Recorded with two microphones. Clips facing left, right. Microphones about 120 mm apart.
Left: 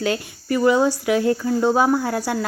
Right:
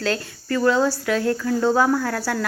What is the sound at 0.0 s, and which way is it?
Speech, 15° left (ahead or behind).